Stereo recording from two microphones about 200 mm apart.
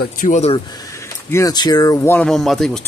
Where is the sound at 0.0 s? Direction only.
40° left (ahead or behind).